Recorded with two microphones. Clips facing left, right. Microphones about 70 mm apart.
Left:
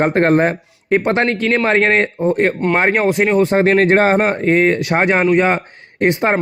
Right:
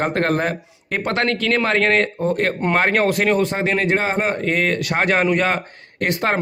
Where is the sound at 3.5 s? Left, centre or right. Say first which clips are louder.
Left 8 dB; left.